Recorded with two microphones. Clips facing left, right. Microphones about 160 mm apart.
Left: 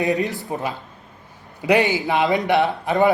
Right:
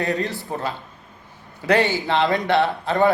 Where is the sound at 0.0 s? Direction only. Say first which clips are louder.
Left 3 dB; 20° left (ahead or behind).